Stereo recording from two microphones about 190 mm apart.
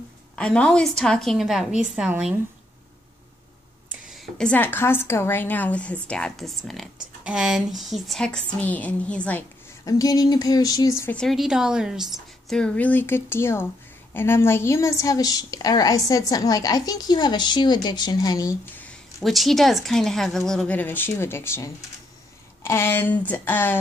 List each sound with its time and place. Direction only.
0.4 s a woman's voice: 5° left (ahead or behind)
4.1 s a woman's voice: 5° left (ahead or behind)
9.8 s speech: 20° left (ahead or behind)
11.1 s a woman's voice: centre (ahead or behind)